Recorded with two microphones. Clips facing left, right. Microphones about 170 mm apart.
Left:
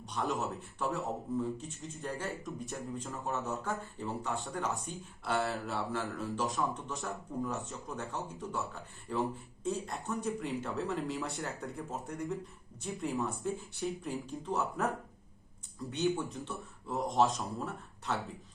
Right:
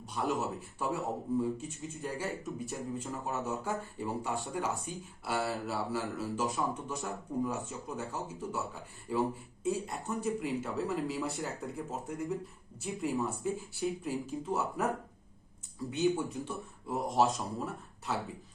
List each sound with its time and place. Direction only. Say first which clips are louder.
0.0 s speech: right 1 dB; centre (ahead or behind)
0.9 s a man's voice: right 2 dB; 15° right (ahead or behind)
3.7 s a man's voice: right 2 dB; 15° right (ahead or behind)
4.7 s a man's voice: right 1 dB; 5° right (ahead or behind)
16.4 s speech: right 3 dB; 10° right (ahead or behind)
17.1 s speech: even; centre (ahead or behind)